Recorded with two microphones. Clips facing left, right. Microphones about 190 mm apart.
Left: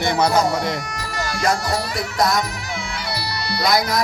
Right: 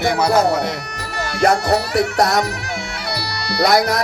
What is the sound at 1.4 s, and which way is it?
Speech, 65° right (ahead or behind).